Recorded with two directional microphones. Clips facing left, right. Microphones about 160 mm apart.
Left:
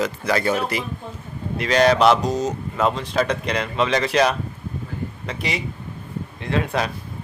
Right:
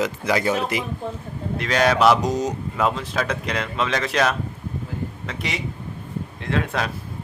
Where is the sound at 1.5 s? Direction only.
Centre (ahead or behind).